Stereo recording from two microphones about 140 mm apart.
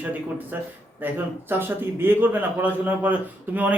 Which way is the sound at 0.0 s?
10° right (ahead or behind).